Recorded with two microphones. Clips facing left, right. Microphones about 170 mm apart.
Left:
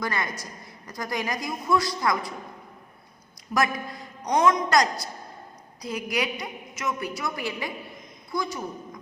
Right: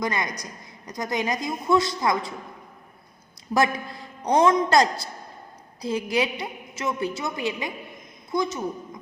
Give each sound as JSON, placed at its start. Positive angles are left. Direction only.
{"t": 0.0, "sound": "a woman's voice", "side_deg": -20}
{"t": 3.5, "sound": "a woman's voice", "side_deg": -30}